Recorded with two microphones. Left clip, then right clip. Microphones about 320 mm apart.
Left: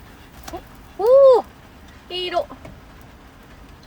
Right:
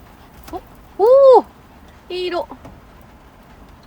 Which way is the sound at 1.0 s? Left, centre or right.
Right.